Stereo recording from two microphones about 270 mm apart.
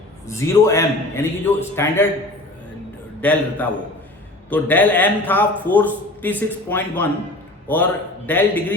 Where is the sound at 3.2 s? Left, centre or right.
Centre.